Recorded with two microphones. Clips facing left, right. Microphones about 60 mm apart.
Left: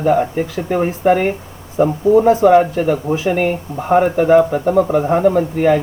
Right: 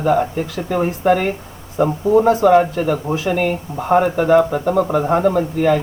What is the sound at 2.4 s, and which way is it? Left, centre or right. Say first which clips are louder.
Speech: left 2 dB; centre.